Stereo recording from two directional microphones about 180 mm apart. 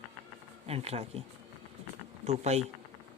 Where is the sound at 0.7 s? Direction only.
35° right (ahead or behind).